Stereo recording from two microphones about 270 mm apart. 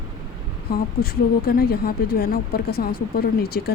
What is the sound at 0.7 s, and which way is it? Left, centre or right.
Speech, left.